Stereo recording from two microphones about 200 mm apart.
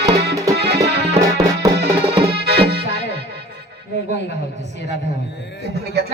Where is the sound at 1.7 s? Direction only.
55° right (ahead or behind).